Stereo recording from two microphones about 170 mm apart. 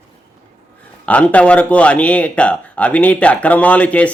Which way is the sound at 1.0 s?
10° left (ahead or behind).